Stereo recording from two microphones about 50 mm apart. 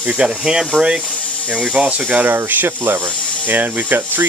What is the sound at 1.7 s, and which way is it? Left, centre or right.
Speech, centre.